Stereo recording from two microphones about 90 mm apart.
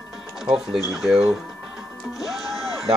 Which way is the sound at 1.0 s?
5° right (ahead or behind).